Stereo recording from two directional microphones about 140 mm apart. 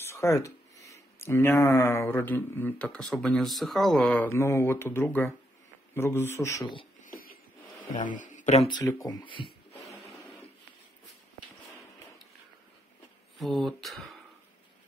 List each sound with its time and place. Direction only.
0.0 s speech: 20° left (ahead or behind)
7.1 s a sound: 90° left
7.8 s speech: 70° left (ahead or behind)
8.6 s speech: 25° left (ahead or behind)
9.8 s music: 50° left (ahead or behind)
13.4 s speech: centre (ahead or behind)